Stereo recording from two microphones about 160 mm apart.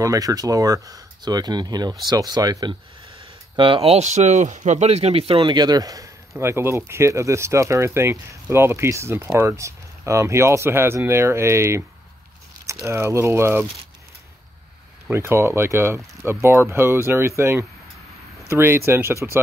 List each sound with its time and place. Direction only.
0.0 s speech: 20° right (ahead or behind)
15.0 s speech: 15° right (ahead or behind)